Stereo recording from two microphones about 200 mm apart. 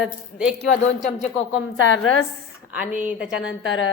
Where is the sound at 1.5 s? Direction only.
65° left (ahead or behind).